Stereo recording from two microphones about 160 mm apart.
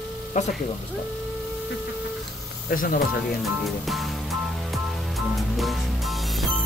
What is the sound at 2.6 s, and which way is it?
Speech, 60° left (ahead or behind).